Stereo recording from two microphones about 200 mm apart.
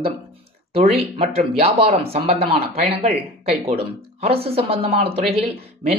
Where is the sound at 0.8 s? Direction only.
30° right (ahead or behind).